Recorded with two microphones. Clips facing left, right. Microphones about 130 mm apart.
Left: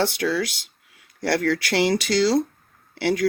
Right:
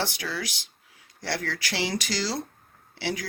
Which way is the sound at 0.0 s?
60° left (ahead or behind).